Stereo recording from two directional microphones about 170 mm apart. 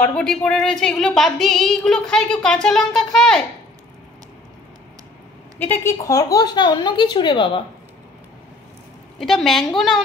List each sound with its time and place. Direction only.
0.0 s a woman's voice: 5° left (ahead or behind)
5.6 s speech: 15° left (ahead or behind); by 7.6 s 30° left (ahead or behind)
9.2 s a woman's voice: centre (ahead or behind)